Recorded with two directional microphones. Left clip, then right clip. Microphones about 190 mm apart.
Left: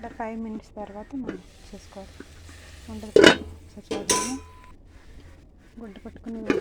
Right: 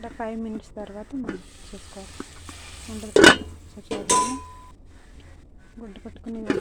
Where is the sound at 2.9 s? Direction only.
5° left (ahead or behind).